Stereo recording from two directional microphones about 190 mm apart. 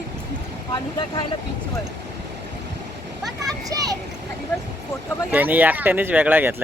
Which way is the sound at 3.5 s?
20° right (ahead or behind).